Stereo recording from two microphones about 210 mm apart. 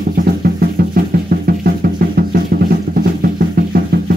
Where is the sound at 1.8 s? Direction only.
45° right (ahead or behind).